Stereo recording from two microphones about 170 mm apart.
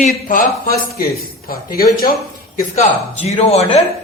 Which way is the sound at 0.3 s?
55° left (ahead or behind).